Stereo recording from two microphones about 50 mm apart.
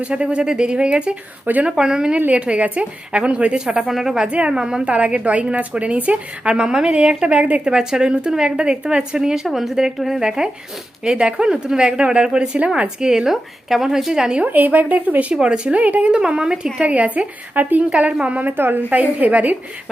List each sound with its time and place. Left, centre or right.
0.0 s a woman's voice: right
2.1 s a woman's voice: right
3.8 s speech: centre
4.3 s a woman's voice: right
14.4 s a woman's voice: right
16.1 s a woman's voice: centre
18.5 s a woman's voice: right